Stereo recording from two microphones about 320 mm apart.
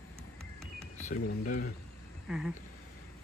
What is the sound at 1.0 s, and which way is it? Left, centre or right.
Speech, left.